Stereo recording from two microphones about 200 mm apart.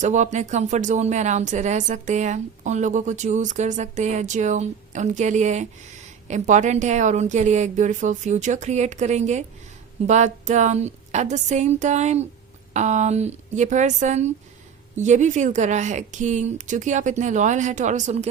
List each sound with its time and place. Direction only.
0.0 s speech: 35° right (ahead or behind)